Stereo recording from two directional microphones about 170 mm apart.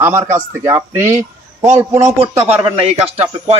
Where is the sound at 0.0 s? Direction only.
15° right (ahead or behind).